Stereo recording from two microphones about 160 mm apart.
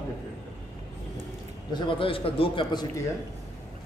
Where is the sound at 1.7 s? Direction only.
30° left (ahead or behind).